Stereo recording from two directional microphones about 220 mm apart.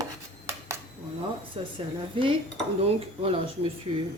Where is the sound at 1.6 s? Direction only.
25° right (ahead or behind).